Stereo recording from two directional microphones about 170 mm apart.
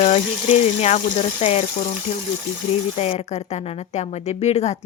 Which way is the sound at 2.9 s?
40° left (ahead or behind).